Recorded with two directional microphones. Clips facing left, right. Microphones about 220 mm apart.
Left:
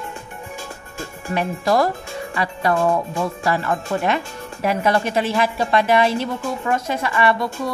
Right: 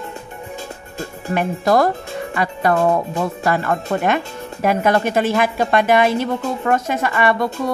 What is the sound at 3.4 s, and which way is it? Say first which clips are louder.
Speech: right 3 dB; 55° right (ahead or behind).